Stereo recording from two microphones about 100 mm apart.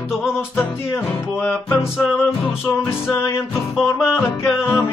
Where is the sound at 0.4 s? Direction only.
25° left (ahead or behind).